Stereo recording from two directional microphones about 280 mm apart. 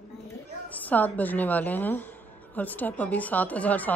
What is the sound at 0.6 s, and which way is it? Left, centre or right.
A woman's voice, centre.